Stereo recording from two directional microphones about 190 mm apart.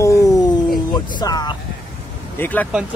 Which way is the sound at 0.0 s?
15° left (ahead or behind).